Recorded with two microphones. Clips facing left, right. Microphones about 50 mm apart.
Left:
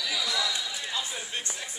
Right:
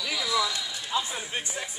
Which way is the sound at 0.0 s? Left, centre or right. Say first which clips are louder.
Even; right.